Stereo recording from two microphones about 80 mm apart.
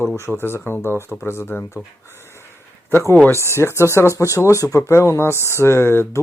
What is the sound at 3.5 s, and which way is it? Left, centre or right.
Speech, left.